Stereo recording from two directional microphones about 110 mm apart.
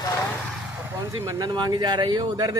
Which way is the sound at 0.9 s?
30° right (ahead or behind).